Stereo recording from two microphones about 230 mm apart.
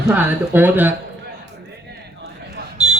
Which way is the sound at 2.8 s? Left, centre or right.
Right.